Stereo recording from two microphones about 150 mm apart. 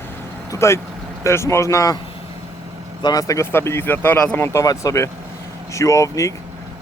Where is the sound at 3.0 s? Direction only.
25° left (ahead or behind).